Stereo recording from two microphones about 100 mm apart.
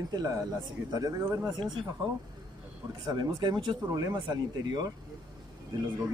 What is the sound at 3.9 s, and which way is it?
Speech, 35° right (ahead or behind).